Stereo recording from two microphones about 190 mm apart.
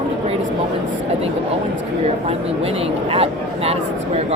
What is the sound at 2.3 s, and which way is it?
Speech, 30° right (ahead or behind).